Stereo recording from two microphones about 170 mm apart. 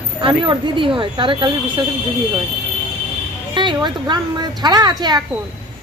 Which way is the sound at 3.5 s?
25° right (ahead or behind).